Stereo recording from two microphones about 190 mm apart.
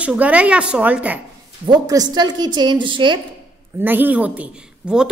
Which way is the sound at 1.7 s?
20° right (ahead or behind).